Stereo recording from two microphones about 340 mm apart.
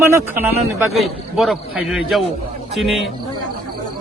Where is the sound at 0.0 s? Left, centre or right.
Centre.